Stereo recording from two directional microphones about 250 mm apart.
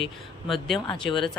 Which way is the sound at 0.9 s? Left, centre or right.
Centre.